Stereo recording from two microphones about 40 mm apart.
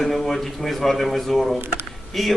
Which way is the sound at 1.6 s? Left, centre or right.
Right.